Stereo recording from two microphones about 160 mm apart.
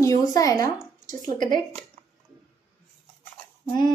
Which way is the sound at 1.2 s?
55° right (ahead or behind).